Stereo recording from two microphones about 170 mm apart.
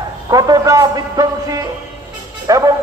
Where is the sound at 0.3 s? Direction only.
20° right (ahead or behind).